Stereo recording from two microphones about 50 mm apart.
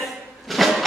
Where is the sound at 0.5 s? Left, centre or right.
Centre.